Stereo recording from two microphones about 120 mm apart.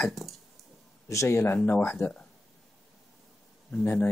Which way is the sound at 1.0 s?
25° left (ahead or behind).